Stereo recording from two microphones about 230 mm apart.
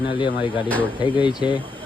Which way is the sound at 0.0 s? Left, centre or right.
Left.